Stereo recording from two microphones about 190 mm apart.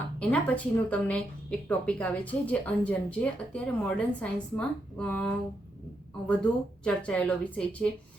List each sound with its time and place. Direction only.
0.2 s speech: 5° left (ahead or behind)